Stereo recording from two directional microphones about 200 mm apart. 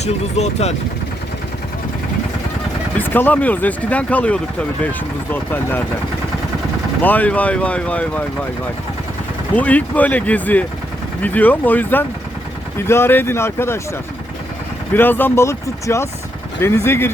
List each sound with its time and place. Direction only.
0.0 s speech: 35° left (ahead or behind)
3.0 s speech: 10° left (ahead or behind)
7.0 s speech: 10° left (ahead or behind)
9.6 s speech: 5° left (ahead or behind)
14.9 s speech: 10° left (ahead or behind)